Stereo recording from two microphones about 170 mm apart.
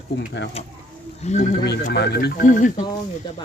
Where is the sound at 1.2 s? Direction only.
45° left (ahead or behind).